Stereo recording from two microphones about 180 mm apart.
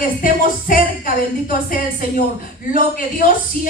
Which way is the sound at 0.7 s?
50° left (ahead or behind).